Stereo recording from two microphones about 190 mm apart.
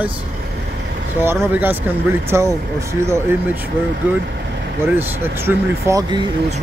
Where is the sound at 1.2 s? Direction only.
10° right (ahead or behind).